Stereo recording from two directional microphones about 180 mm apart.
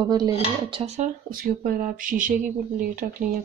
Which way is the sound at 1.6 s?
50° right (ahead or behind).